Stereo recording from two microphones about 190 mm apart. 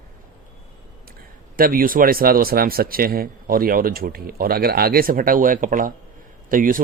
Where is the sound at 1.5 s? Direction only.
50° right (ahead or behind).